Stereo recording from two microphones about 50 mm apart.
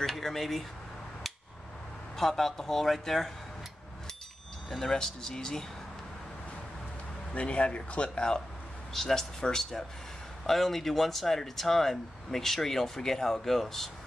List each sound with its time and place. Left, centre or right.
0.0 s speech: centre
2.1 s speech: centre
4.6 s speech: centre
7.3 s speech: left; by 13.8 s centre